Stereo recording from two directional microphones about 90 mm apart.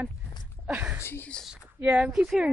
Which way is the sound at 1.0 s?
25° left (ahead or behind).